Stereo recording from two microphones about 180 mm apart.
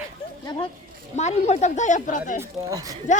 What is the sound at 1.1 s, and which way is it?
A woman's voice, 40° left (ahead or behind).